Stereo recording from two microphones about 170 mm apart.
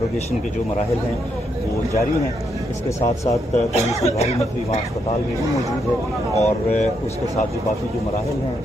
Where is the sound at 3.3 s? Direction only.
40° left (ahead or behind).